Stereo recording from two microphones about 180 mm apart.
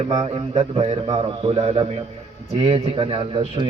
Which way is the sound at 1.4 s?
35° right (ahead or behind).